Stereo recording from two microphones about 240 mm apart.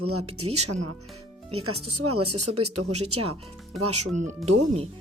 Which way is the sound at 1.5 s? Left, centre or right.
Right.